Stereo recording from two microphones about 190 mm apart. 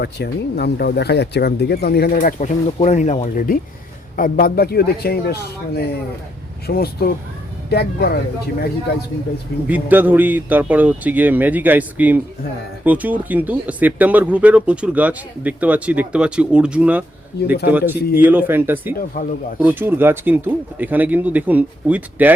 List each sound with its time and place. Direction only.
0.0 s speech: 60° left (ahead or behind)
2.1 s speech: 40° left (ahead or behind); by 8.2 s 55° left (ahead or behind)
9.6 s speech: 10° right (ahead or behind)
17.4 s speech: 55° left (ahead or behind)
17.7 s speech: 10° right (ahead or behind)
19.1 s speech: 55° left (ahead or behind)
19.5 s speech: 10° right (ahead or behind)